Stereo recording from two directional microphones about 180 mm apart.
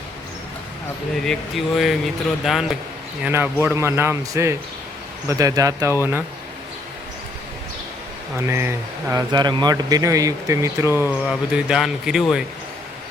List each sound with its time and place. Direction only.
1.2 s speech: centre (ahead or behind); by 6.0 s 15° right (ahead or behind)
8.4 s speech: 15° right (ahead or behind)
11.2 s speech: 5° right (ahead or behind)